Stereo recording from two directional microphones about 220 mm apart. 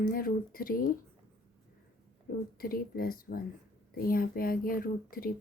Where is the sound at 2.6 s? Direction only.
40° left (ahead or behind).